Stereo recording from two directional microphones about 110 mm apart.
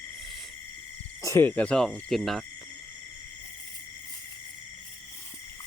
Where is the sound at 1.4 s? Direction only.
10° left (ahead or behind).